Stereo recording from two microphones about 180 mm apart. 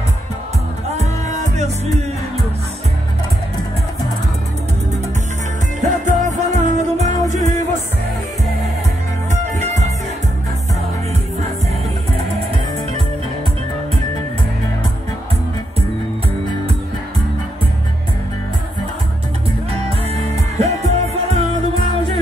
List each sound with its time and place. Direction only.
0.9 s music: 40° right (ahead or behind)
5.8 s music: 40° right (ahead or behind)
19.9 s music: 35° right (ahead or behind)